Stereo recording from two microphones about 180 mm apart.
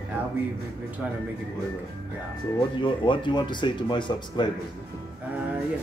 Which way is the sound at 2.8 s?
25° left (ahead or behind).